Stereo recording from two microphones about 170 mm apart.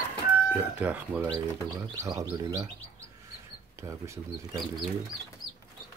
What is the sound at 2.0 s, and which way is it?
Speech, 20° right (ahead or behind).